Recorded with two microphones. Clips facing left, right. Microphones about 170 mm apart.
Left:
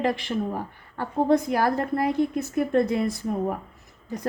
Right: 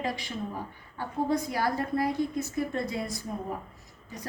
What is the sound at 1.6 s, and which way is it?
A woman's voice, 55° left (ahead or behind).